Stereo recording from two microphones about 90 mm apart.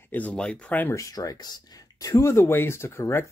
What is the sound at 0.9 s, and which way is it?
Speech, 40° left (ahead or behind).